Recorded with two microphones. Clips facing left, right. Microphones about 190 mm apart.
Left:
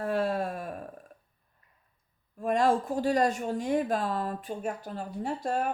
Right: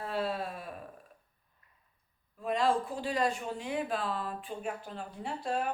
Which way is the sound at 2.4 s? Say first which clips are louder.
Left 4 dB; 45° left (ahead or behind).